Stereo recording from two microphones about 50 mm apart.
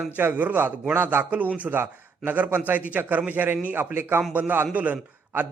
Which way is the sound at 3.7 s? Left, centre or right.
Right.